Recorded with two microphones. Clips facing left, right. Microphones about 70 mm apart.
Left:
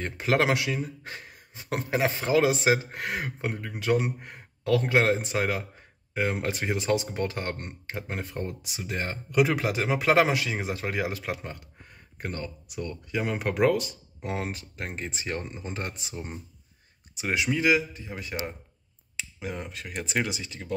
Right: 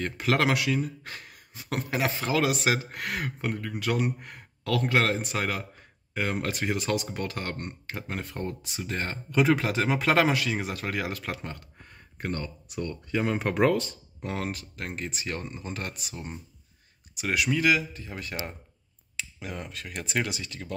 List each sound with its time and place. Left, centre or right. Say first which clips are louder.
0.0 s speech: left 1 dB; centre